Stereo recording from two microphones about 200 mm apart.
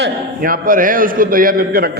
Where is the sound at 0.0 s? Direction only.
45° right (ahead or behind).